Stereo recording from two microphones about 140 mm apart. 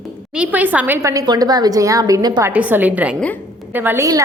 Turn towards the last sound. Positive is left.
turn(degrees=-20)  # may be behind; listen again after turning